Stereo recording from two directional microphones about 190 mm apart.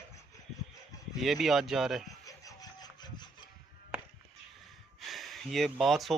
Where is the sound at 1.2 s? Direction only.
Centre (ahead or behind).